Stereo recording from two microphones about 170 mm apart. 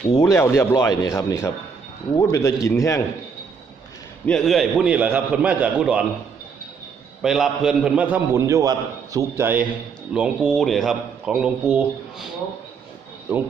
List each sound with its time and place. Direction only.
0.2 s speech: 15° left (ahead or behind)
4.3 s a man's voice: centre (ahead or behind)
7.2 s a man's voice: centre (ahead or behind)